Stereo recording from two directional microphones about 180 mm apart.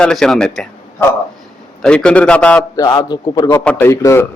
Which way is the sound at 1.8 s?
5° left (ahead or behind).